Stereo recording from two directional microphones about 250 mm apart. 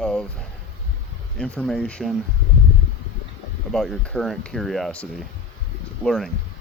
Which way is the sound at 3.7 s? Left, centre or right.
Centre.